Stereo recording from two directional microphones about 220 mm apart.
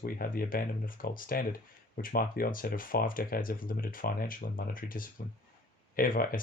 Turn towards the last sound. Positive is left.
turn(degrees=40)  # may be behind; listen again after turning